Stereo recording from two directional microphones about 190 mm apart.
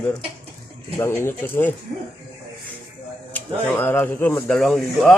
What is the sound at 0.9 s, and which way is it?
Speech, 15° left (ahead or behind).